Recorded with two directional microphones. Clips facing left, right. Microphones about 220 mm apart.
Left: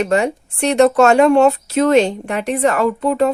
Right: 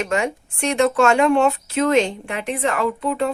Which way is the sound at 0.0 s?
35° left (ahead or behind).